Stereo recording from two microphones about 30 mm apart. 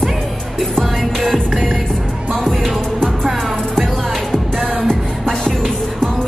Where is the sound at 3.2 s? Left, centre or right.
Centre.